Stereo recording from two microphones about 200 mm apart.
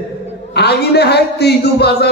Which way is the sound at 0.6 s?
55° left (ahead or behind).